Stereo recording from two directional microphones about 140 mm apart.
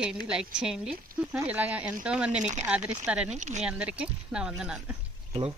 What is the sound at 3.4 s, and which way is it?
Speech, 60° right (ahead or behind).